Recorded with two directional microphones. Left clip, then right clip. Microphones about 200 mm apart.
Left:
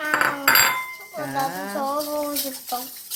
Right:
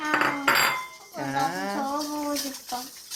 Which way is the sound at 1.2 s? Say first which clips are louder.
Even; 10° right (ahead or behind).